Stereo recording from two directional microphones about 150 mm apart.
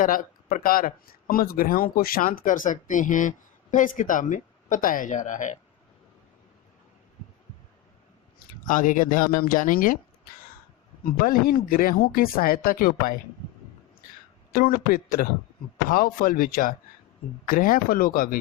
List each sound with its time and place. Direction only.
0.0 s speech: 65° left (ahead or behind)
8.6 s speech: 60° left (ahead or behind)
11.0 s speech: 75° left (ahead or behind)
14.5 s speech: 75° left (ahead or behind)